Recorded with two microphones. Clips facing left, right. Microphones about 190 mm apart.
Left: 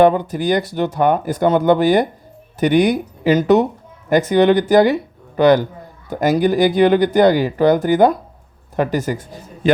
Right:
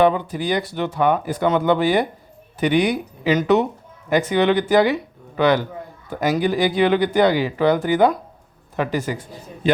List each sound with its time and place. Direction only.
0.0 s a man's voice: 45° left (ahead or behind)